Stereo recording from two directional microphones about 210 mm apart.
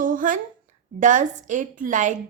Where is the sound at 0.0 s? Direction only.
40° right (ahead or behind).